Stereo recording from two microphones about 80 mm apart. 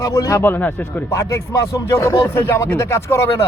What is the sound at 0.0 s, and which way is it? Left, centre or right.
Speech, left.